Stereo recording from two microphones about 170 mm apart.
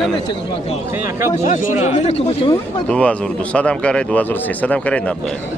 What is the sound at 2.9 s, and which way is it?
Speech, 5° left (ahead or behind).